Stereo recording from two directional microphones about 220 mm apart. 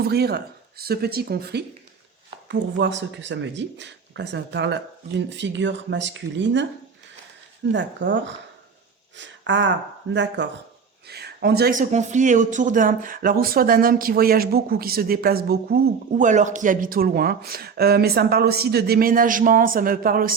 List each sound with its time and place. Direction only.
0.0 s speech: 45° right (ahead or behind)
7.7 s speech: 55° right (ahead or behind)